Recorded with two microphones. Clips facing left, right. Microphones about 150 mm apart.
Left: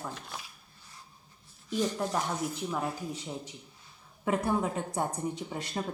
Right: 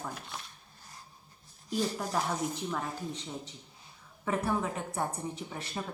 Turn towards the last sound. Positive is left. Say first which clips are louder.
# left 3 dB
turn(degrees=15)  # may be behind; listen again after turning